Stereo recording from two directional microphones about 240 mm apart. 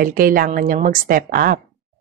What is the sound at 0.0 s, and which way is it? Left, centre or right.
A woman's voice, right.